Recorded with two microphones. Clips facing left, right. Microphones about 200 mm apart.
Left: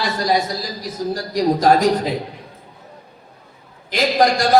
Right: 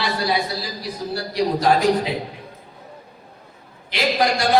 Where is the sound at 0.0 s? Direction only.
45° left (ahead or behind).